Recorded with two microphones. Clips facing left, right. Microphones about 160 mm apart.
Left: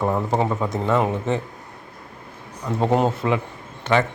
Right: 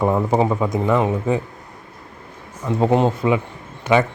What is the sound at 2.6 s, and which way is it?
A man's voice, 5° right (ahead or behind).